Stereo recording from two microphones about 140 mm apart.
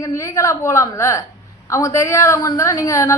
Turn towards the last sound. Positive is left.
turn(degrees=20)  # may be behind; listen again after turning